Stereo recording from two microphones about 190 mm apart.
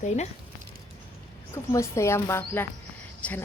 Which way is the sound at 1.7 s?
15° left (ahead or behind).